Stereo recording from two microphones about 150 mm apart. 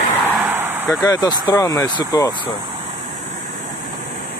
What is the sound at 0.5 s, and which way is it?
Vehicle, 15° right (ahead or behind).